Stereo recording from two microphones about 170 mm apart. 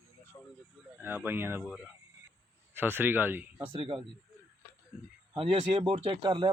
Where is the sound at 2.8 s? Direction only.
10° right (ahead or behind).